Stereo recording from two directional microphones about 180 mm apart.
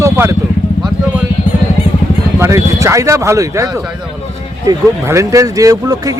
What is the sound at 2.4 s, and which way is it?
Speech, 15° right (ahead or behind).